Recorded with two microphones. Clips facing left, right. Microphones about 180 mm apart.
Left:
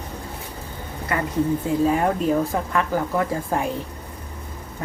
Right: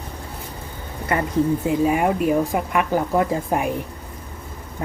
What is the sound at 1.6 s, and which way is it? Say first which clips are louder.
Speech: right 1 dB; 15° right (ahead or behind).